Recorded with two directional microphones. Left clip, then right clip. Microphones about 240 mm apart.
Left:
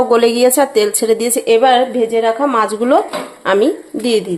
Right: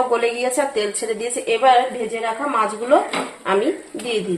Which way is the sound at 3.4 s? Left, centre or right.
Left.